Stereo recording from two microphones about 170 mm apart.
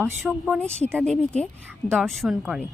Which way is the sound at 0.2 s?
5° right (ahead or behind).